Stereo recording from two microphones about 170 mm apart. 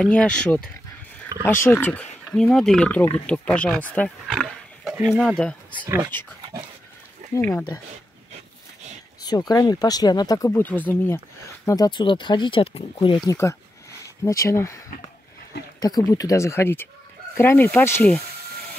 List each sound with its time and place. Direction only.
0.0 s speech: 5° left (ahead or behind)
7.3 s speech: 10° left (ahead or behind)
9.2 s speech: 25° left (ahead or behind)
13.3 s speech: 15° left (ahead or behind)
15.8 s speech: 20° left (ahead or behind)